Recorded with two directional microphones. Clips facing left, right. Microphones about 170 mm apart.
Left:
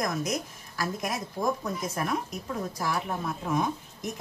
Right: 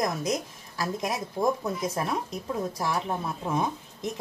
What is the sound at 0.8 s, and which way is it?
A woman's voice, 25° right (ahead or behind).